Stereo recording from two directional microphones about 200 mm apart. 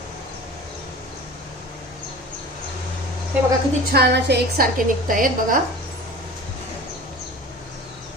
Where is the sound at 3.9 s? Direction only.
55° right (ahead or behind).